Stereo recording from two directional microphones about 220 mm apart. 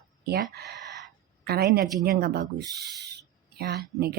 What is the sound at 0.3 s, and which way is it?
A woman's voice, 45° right (ahead or behind).